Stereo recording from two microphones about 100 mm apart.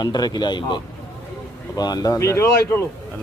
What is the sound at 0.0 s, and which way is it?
Speech, 45° left (ahead or behind).